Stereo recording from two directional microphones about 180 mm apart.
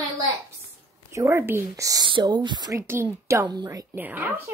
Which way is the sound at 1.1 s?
15° right (ahead or behind).